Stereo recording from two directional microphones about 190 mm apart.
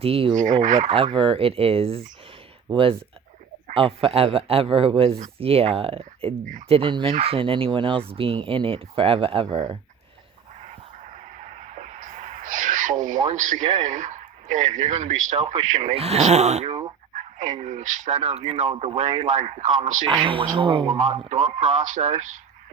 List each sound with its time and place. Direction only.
0.0 s speech: 30° right (ahead or behind)
11.0 s a sound: 35° right (ahead or behind)
13.3 s speech: 40° right (ahead or behind)
13.8 s a sound: 40° right (ahead or behind)
15.0 s speech: 40° right (ahead or behind)
17.7 s speech: 40° right (ahead or behind)
20.1 s speech: 25° right (ahead or behind)
21.6 s speech: 40° right (ahead or behind)